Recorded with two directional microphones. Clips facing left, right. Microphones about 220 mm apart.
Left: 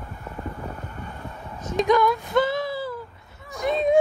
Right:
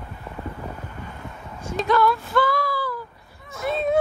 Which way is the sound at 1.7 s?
15° left (ahead or behind).